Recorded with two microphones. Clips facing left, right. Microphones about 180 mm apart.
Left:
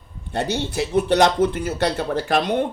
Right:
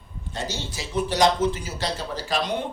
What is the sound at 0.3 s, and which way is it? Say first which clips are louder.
Speech: left 8 dB; 60° left (ahead or behind).